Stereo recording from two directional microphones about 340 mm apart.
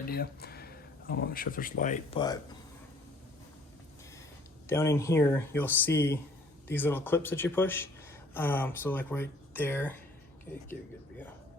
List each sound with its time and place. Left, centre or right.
0.1 s speech: left
4.6 s speech: centre